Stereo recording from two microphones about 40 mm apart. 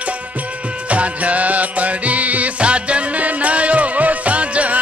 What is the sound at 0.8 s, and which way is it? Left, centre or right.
Music, right.